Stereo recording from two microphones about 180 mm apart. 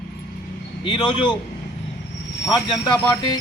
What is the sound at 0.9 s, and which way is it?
Speech, 25° left (ahead or behind).